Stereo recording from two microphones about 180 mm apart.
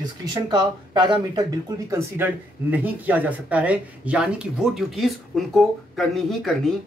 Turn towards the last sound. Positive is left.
turn(degrees=0)  # may be behind; listen again after turning